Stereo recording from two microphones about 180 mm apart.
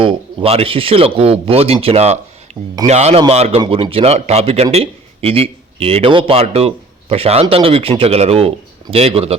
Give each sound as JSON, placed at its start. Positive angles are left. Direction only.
{"t": 0.0, "sound": "a man's voice", "side_deg": -30}
{"t": 2.5, "sound": "a sound", "side_deg": -40}
{"t": 2.8, "sound": "a man's voice", "side_deg": -40}